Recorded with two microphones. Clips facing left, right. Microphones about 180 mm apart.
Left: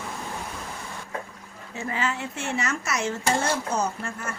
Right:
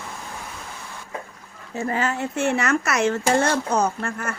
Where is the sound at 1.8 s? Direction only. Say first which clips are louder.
Right 5 dB; 45° right (ahead or behind).